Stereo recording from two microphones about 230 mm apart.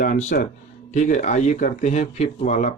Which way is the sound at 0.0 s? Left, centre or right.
Left.